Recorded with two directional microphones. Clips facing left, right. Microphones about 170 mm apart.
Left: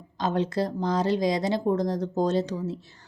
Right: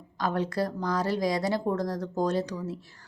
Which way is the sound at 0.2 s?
20° left (ahead or behind).